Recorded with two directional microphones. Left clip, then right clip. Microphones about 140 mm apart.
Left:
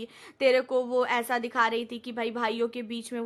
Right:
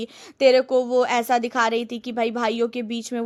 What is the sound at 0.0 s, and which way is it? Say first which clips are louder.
A woman's voice: right 7 dB; 35° right (ahead or behind).